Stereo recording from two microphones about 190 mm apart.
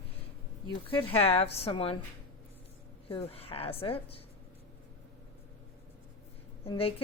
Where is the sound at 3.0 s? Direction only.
30° left (ahead or behind).